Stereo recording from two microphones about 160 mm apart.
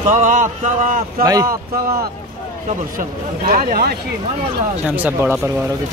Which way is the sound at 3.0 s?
60° right (ahead or behind).